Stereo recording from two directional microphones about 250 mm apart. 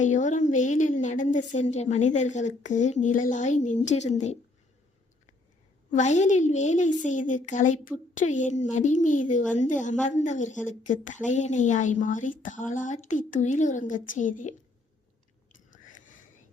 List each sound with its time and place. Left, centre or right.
0.0 s a woman's voice: left
5.9 s a woman's voice: left